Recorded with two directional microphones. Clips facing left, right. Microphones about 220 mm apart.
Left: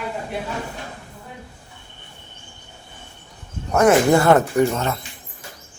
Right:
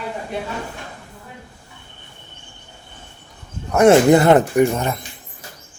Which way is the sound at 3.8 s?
25° right (ahead or behind).